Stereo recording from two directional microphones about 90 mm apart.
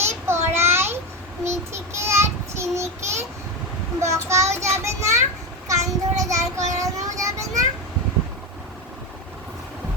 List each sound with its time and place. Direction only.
0.0 s a sound: 30° right (ahead or behind)
1.5 s child singing: 30° right (ahead or behind)
4.0 s a child's voice: 35° right (ahead or behind)
5.6 s child singing: 40° right (ahead or behind)